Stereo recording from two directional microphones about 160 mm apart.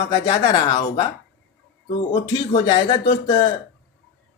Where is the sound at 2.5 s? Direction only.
30° left (ahead or behind).